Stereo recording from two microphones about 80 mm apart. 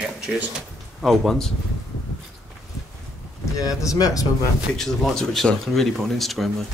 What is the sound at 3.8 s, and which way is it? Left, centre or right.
Speech, left.